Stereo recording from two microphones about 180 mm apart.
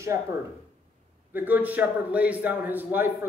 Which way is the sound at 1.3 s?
10° right (ahead or behind).